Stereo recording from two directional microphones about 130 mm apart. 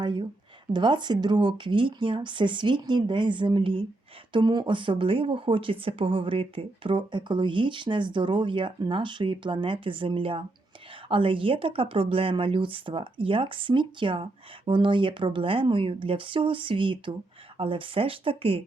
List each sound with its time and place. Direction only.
0.0 s a woman's voice: 35° right (ahead or behind)